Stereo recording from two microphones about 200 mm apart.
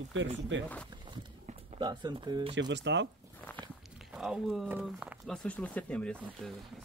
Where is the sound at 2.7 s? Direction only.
65° right (ahead or behind).